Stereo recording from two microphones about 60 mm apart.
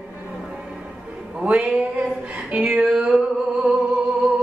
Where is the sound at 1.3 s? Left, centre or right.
Right.